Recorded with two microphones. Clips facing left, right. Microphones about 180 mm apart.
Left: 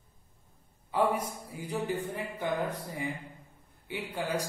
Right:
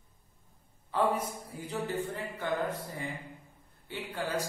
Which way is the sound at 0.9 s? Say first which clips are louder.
Left 1 dB; 10° left (ahead or behind).